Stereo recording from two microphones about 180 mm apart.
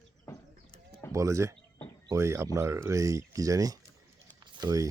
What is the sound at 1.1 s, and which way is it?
Speech, 15° right (ahead or behind).